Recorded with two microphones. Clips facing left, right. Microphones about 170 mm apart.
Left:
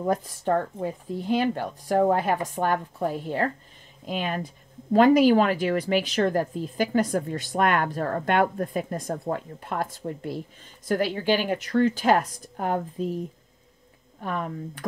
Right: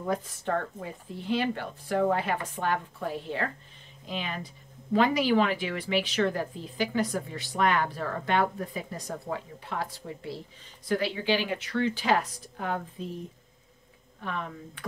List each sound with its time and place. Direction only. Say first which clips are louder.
0.7 s a woman's voice: left 8 dB; 40° left (ahead or behind)
14.2 s a woman's voice: left 5 dB; 45° left (ahead or behind)